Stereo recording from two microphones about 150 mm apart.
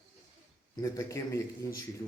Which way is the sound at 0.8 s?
20° left (ahead or behind).